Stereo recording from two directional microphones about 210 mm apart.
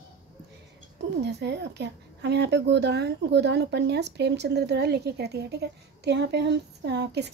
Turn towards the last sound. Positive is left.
turn(degrees=-55)  # may be behind; listen again after turning